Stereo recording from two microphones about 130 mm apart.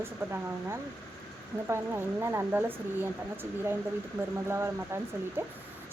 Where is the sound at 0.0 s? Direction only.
20° right (ahead or behind).